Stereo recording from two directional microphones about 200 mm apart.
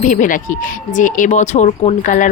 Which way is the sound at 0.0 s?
40° left (ahead or behind).